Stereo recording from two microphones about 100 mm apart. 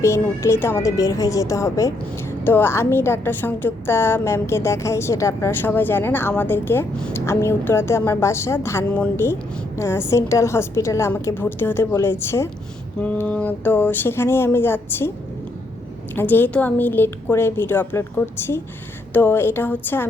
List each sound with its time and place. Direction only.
0.0 s a woman's voice: 25° left (ahead or behind)
2.4 s a woman's voice: 20° left (ahead or behind)
13.0 s a woman's voice: 15° left (ahead or behind)
16.1 s a woman's voice: 20° left (ahead or behind)